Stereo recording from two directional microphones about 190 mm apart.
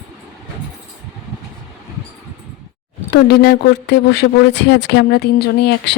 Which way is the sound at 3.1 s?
60° left (ahead or behind).